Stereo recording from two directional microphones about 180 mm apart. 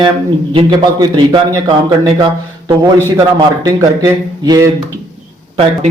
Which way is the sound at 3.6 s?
20° right (ahead or behind).